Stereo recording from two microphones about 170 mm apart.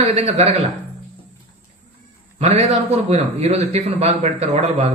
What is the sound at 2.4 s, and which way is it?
A man's voice, 40° right (ahead or behind).